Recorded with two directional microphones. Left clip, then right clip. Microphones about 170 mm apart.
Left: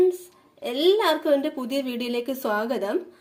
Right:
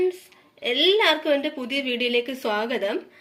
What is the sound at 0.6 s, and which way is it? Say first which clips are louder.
A woman's voice: right 2 dB; 60° left (ahead or behind).